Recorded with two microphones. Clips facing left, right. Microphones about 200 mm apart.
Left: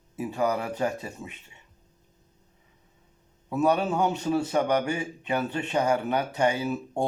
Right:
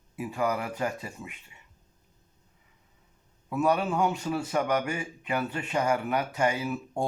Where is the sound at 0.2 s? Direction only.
30° left (ahead or behind).